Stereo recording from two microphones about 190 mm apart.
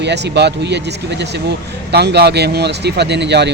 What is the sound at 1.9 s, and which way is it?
Speech, 60° right (ahead or behind).